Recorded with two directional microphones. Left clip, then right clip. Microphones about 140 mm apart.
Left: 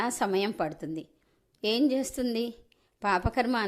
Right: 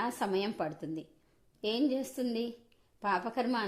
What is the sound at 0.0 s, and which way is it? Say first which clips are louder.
A woman's voice: left 5 dB; 20° left (ahead or behind).